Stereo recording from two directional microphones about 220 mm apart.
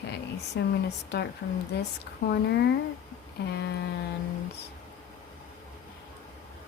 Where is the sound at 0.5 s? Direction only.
50° left (ahead or behind).